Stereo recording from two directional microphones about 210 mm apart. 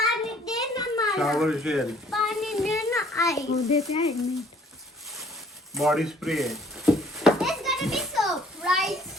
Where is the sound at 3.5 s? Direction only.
30° left (ahead or behind).